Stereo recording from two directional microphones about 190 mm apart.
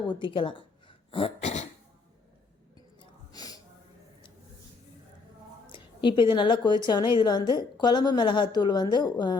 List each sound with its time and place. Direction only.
0.1 s speech: 25° left (ahead or behind)
2.7 s gasp: 20° left (ahead or behind)
5.6 s a woman's voice: 25° left (ahead or behind)